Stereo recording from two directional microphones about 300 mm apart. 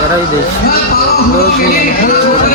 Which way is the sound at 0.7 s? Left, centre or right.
Left.